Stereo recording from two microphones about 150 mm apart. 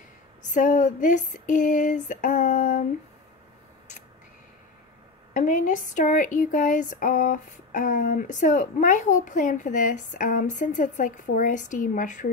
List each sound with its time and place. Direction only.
0.4 s a woman's voice: 55° left (ahead or behind)
5.3 s a woman's voice: 60° left (ahead or behind)